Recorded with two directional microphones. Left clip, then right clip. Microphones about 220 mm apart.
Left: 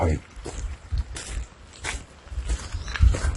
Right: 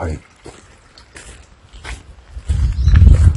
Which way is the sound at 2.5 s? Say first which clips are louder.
Right 6 dB; centre (ahead or behind).